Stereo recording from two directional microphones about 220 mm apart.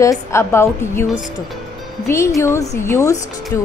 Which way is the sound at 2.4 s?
10° left (ahead or behind).